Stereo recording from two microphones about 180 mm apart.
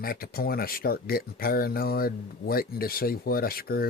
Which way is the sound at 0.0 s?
55° left (ahead or behind).